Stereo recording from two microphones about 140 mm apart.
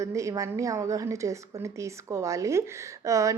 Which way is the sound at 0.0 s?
20° right (ahead or behind).